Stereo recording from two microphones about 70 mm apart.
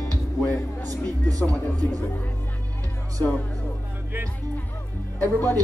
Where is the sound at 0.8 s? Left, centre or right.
Right.